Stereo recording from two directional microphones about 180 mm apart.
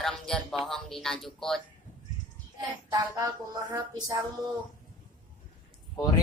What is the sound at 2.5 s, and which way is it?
Child singing, 25° right (ahead or behind).